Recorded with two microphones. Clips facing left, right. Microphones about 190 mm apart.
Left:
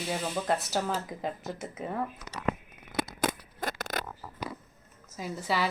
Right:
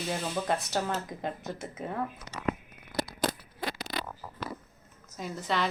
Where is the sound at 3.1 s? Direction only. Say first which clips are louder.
Even; 50° left (ahead or behind).